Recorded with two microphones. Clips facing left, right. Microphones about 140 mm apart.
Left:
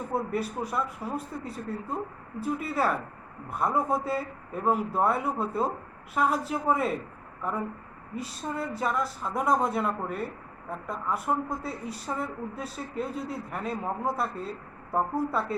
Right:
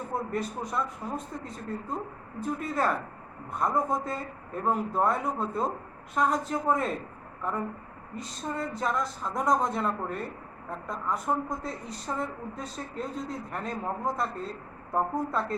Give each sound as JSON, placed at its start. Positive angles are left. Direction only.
{"t": 0.1, "sound": "a woman's voice", "side_deg": 5}